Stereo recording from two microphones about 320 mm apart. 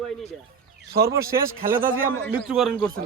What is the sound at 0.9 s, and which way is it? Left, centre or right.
Speech, right.